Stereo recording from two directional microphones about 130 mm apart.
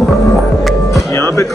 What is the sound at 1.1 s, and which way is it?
Speech, 20° left (ahead or behind).